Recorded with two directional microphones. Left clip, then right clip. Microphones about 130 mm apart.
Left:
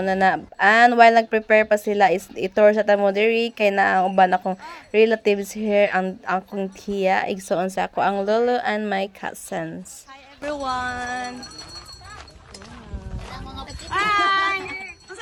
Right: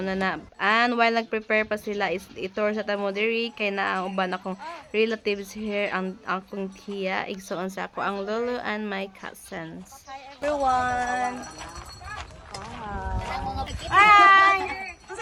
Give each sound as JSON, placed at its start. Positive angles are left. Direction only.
{"t": 0.0, "sound": "speech", "side_deg": 30}
{"t": 10.4, "sound": "speech", "side_deg": 15}
{"t": 13.0, "sound": "a sound", "side_deg": -15}
{"t": 13.7, "sound": "speech", "side_deg": -15}